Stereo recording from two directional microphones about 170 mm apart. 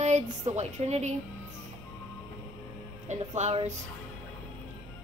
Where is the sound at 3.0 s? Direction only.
45° right (ahead or behind).